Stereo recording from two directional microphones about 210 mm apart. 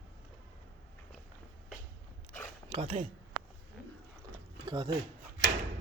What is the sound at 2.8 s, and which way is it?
Speech, 30° right (ahead or behind).